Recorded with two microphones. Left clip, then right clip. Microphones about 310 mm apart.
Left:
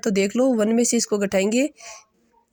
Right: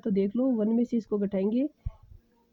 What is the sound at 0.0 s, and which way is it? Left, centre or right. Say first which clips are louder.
Speech: left 8 dB; right.